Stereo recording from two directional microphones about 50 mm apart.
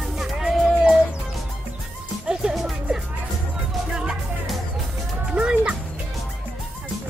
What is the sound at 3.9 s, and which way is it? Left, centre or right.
Music, centre.